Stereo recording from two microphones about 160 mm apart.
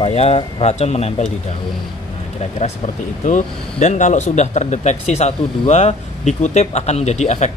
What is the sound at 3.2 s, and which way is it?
Speech, 50° left (ahead or behind).